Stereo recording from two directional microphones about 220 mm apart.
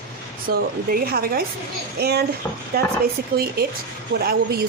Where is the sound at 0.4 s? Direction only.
40° right (ahead or behind).